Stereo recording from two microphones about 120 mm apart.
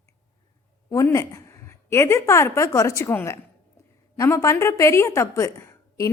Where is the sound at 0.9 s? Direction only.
25° left (ahead or behind).